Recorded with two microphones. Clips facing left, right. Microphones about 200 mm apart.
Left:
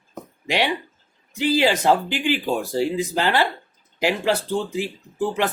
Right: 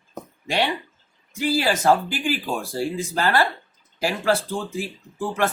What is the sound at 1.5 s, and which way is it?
Speech, 20° left (ahead or behind).